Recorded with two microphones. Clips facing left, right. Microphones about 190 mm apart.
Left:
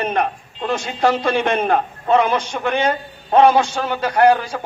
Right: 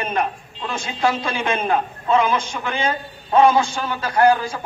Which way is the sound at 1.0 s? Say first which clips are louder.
Left 3 dB; 40° left (ahead or behind).